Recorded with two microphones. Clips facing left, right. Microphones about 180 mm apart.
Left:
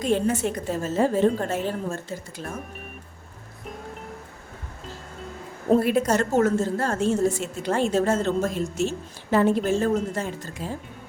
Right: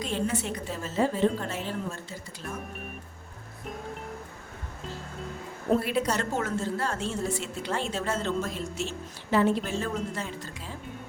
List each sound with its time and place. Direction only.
0.0 s a woman's voice: 50° left (ahead or behind)
5.8 s a woman's voice: 45° left (ahead or behind)